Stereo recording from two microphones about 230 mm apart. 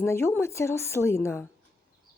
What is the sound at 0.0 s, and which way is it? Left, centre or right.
Speech, centre.